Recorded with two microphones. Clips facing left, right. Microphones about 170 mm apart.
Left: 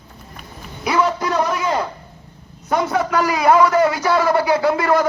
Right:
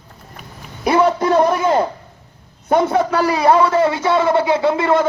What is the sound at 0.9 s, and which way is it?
Speech, 30° right (ahead or behind).